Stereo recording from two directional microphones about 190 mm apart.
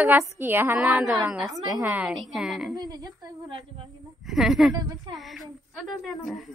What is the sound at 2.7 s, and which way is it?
Speech, 20° right (ahead or behind).